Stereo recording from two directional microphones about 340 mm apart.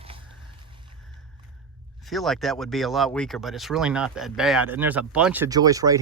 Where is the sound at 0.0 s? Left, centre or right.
Centre.